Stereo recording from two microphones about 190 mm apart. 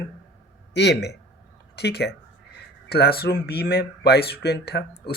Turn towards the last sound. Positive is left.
turn(degrees=60)  # may be behind; listen again after turning